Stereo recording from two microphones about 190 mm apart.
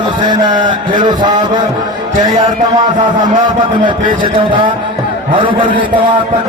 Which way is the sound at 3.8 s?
25° right (ahead or behind).